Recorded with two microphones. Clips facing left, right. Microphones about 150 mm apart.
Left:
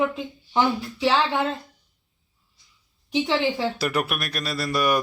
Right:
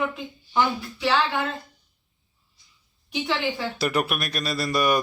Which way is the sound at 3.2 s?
30° left (ahead or behind).